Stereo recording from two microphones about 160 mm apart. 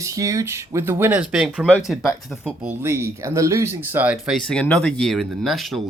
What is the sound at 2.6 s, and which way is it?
Speech, 15° right (ahead or behind).